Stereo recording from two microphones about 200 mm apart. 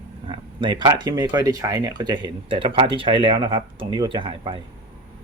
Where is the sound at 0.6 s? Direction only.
20° right (ahead or behind).